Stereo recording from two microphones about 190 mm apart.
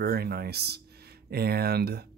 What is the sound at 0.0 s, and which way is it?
Speech, 55° right (ahead or behind).